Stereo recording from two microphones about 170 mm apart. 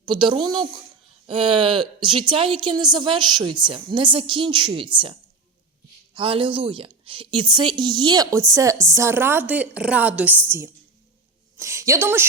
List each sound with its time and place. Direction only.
0.0 s a woman's voice: 30° right (ahead or behind)
6.1 s a woman's voice: 30° right (ahead or behind); by 10.4 s 10° right (ahead or behind)
11.5 s a woman's voice: 15° right (ahead or behind)